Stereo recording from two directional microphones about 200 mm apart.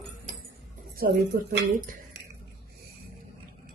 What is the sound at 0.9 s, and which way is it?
Speech, 50° right (ahead or behind).